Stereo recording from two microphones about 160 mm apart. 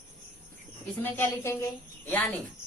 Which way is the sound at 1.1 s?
15° left (ahead or behind).